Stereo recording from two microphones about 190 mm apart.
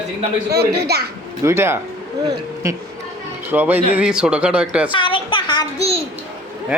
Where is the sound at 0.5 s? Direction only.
55° right (ahead or behind).